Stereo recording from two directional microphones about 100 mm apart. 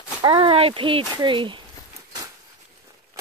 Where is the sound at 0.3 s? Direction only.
65° right (ahead or behind).